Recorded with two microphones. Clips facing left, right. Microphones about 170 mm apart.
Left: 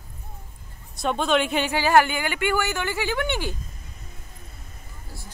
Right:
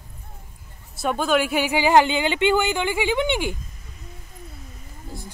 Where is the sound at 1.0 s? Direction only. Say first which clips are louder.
Right 1 dB; centre (ahead or behind).